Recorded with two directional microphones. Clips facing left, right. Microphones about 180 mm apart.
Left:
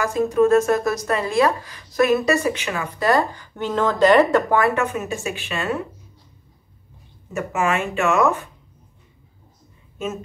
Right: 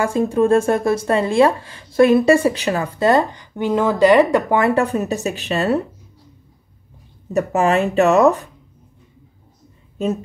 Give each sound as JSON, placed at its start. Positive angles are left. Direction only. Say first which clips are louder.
{"t": 0.0, "sound": "speech", "louder": "right 1 dB", "side_deg": -30}
{"t": 3.1, "sound": "speech", "louder": "right 3 dB", "side_deg": -20}
{"t": 7.3, "sound": "speech", "louder": "right 6 dB", "side_deg": -35}